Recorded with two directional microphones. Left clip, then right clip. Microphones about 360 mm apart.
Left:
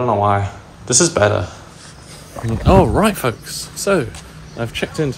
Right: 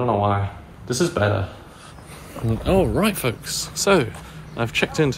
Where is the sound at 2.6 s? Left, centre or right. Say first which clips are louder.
Left 7 dB; centre.